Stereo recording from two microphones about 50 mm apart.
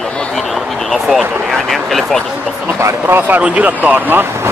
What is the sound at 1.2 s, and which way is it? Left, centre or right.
Speech, right.